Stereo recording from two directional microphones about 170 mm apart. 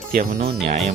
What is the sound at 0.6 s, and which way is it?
Speech, 40° right (ahead or behind).